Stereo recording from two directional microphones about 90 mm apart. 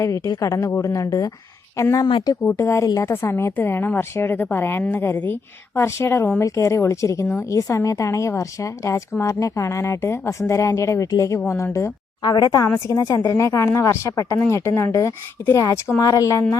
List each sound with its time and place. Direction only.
0.3 s a woman's voice: 40° left (ahead or behind)
12.2 s speech: 45° left (ahead or behind)
12.6 s a woman's voice: 30° left (ahead or behind)
13.0 s a woman's voice: 40° left (ahead or behind)